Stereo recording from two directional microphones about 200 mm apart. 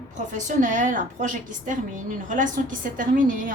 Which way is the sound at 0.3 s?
40° right (ahead or behind).